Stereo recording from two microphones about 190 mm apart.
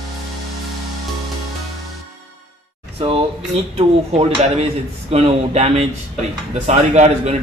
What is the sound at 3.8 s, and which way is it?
A man's voice, 30° right (ahead or behind).